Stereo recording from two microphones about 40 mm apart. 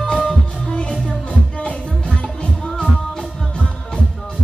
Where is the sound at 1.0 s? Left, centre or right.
Left.